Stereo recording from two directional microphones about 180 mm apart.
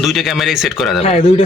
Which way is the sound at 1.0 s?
35° left (ahead or behind).